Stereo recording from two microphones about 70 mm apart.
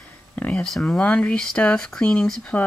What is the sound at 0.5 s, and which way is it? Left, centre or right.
Speech, centre.